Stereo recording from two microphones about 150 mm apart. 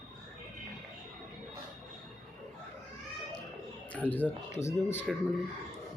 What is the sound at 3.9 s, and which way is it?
Speech, 10° left (ahead or behind).